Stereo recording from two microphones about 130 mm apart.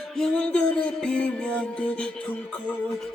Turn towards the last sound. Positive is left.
turn(degrees=10)  # may be behind; listen again after turning